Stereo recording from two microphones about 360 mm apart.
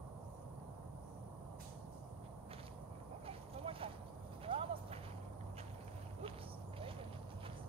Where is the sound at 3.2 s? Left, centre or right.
Centre.